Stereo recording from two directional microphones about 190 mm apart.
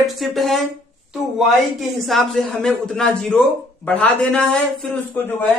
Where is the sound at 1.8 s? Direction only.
Centre (ahead or behind).